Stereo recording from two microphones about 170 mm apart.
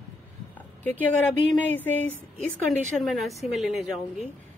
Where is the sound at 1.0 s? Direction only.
10° left (ahead or behind).